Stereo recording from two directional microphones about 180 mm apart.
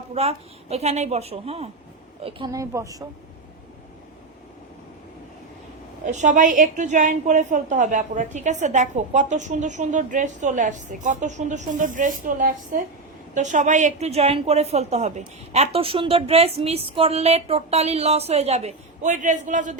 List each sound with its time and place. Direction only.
0.1 s a woman's voice: 35° right (ahead or behind)
2.2 s a woman's voice: 20° right (ahead or behind)
6.1 s a woman's voice: 40° right (ahead or behind)